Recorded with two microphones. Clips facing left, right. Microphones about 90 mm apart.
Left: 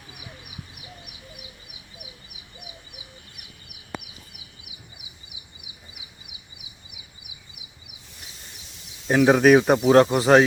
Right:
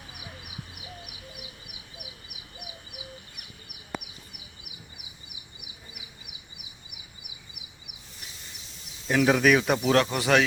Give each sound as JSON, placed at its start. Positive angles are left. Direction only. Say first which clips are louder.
{"t": 9.1, "sound": "speech", "louder": "left 5 dB", "side_deg": 25}
{"t": 9.4, "sound": "speech", "louder": "left 6 dB", "side_deg": 35}